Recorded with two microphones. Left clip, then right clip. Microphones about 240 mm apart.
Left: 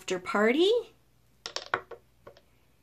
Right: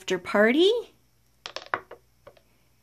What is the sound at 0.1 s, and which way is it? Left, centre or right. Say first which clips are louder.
Speech: right 4 dB; right.